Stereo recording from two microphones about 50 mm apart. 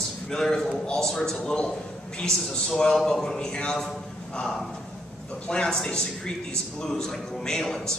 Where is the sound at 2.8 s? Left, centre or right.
Centre.